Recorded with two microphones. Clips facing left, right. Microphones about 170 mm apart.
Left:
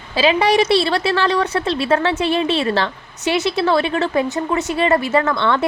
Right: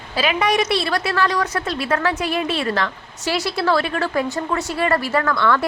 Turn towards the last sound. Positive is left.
turn(degrees=25)  # may be behind; listen again after turning